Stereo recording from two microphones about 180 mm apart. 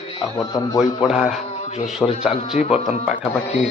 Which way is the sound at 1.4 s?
40° left (ahead or behind).